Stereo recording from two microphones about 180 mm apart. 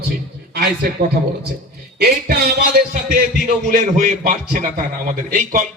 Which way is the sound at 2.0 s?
60° right (ahead or behind).